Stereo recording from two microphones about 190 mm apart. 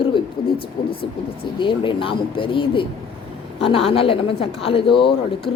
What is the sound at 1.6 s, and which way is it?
A woman's voice, 25° left (ahead or behind).